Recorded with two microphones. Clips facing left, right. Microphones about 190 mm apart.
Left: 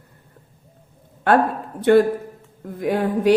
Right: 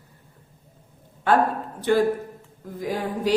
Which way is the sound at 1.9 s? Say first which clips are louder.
Left 6 dB; 60° left (ahead or behind).